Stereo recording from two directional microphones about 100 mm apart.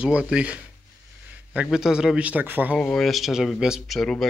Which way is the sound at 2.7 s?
5° left (ahead or behind).